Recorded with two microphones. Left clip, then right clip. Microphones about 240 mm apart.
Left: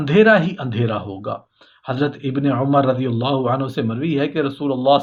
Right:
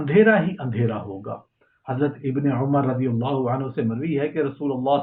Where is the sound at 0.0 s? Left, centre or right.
Left.